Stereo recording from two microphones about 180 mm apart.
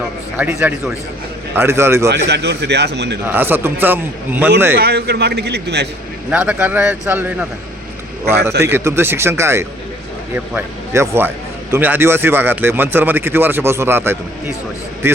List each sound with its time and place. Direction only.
0.3 s speech: 10° right (ahead or behind)
2.0 s a man's voice: 65° right (ahead or behind)
3.2 s speech: 10° right (ahead or behind)
4.8 s a man's voice: 60° right (ahead or behind)
6.3 s speech: 5° right (ahead or behind)
8.6 s speech: 15° right (ahead or behind)